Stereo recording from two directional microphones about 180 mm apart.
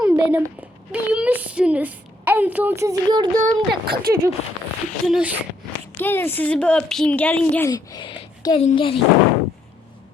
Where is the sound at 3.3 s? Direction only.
50° right (ahead or behind).